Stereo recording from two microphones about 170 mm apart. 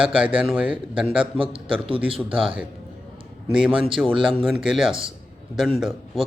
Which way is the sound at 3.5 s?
5° right (ahead or behind).